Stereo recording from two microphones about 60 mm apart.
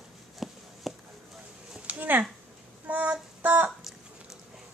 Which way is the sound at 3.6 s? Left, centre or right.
Centre.